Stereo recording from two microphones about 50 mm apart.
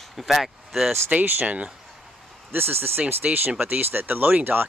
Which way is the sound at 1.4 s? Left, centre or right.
Right.